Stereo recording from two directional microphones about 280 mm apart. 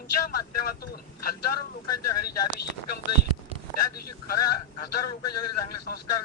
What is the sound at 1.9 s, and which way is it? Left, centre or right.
Speech, left.